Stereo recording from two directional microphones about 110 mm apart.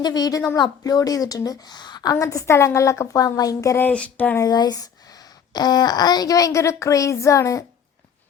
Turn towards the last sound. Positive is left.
turn(degrees=30)  # may be behind; listen again after turning